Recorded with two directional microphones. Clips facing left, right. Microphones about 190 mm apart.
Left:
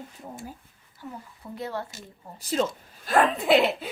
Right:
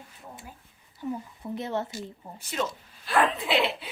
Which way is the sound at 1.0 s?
20° right (ahead or behind).